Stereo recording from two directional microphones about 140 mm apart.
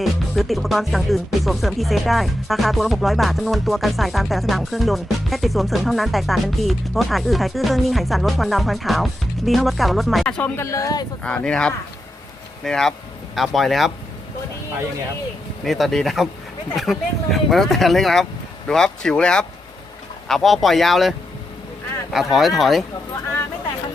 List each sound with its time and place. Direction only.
0.0 s music: centre (ahead or behind)
10.6 s speech: 20° left (ahead or behind)
11.2 s speech: 5° left (ahead or behind)
12.6 s music: 5° left (ahead or behind)
15.6 s music: centre (ahead or behind)